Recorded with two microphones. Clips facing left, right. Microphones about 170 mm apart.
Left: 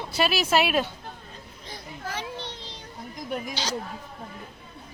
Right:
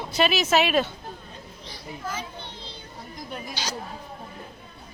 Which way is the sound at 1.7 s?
70° left (ahead or behind).